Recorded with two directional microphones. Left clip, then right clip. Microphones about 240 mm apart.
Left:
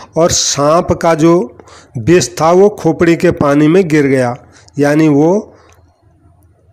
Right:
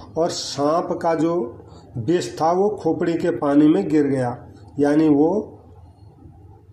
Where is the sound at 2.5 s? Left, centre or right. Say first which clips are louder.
Left 13 dB; left.